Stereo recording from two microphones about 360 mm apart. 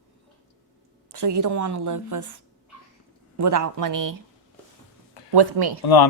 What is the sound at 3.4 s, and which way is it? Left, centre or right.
Speech, right.